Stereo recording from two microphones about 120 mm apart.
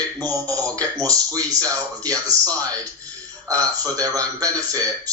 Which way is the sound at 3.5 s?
30° right (ahead or behind).